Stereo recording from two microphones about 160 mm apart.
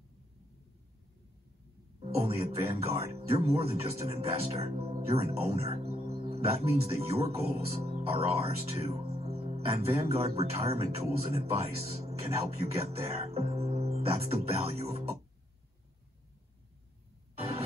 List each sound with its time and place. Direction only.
2.2 s speech: 40° right (ahead or behind)